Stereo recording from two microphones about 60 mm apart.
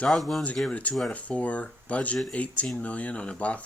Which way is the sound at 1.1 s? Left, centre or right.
Left.